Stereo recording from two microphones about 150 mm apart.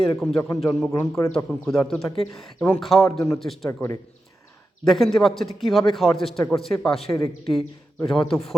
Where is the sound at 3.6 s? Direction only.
20° left (ahead or behind).